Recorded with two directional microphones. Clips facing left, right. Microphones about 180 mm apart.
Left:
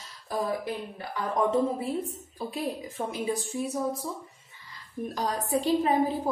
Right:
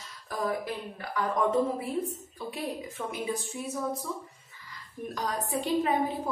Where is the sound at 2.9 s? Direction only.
35° left (ahead or behind).